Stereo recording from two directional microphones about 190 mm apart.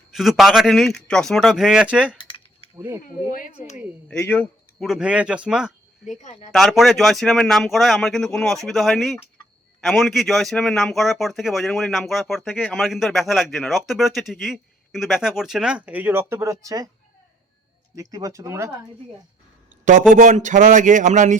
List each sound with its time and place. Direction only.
0.1 s a man's voice: centre (ahead or behind)
2.1 s a sound: 25° left (ahead or behind)
2.7 s speech: 15° right (ahead or behind)
4.1 s a man's voice: 5° left (ahead or behind)
6.1 s a woman's voice: 40° left (ahead or behind)
6.5 s a man's voice: centre (ahead or behind); by 16.9 s 20° right (ahead or behind)
17.9 s speech: 20° right (ahead or behind)
19.8 s speech: 45° right (ahead or behind)